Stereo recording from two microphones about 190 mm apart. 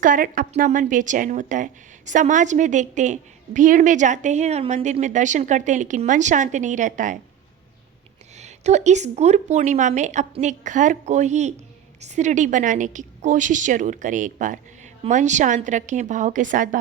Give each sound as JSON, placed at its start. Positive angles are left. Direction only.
{"t": 0.0, "sound": "a woman's voice", "side_deg": -45}
{"t": 8.4, "sound": "a woman's voice", "side_deg": -35}